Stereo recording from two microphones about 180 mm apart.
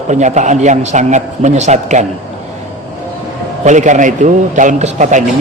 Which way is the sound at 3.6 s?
40° right (ahead or behind).